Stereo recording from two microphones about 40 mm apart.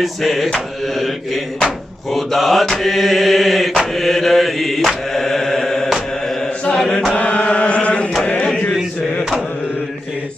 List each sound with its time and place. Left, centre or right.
0.0 s mantra: centre
7.2 s chant: left
8.2 s a sound: left